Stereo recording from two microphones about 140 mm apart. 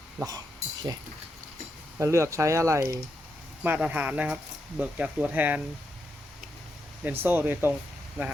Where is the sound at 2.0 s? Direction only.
20° right (ahead or behind).